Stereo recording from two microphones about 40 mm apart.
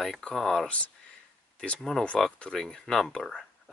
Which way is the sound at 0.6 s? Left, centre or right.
Left.